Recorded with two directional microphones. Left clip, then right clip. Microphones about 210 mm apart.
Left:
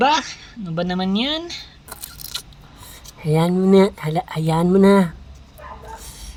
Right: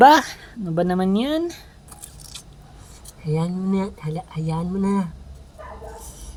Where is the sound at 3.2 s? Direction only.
45° left (ahead or behind).